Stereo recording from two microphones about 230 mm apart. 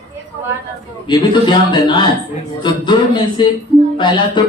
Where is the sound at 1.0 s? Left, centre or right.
Centre.